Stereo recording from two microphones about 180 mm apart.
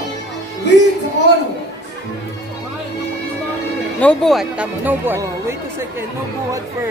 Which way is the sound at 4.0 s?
5° left (ahead or behind).